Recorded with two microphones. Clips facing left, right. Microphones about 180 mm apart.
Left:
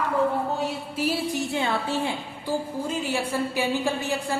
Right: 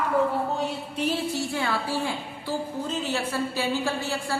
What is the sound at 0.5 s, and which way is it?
A woman's voice, 5° left (ahead or behind).